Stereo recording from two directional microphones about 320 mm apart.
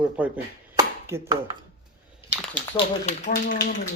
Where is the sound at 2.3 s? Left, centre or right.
Centre.